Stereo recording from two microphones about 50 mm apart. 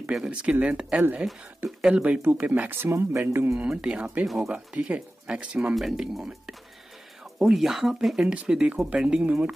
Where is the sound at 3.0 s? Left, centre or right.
Right.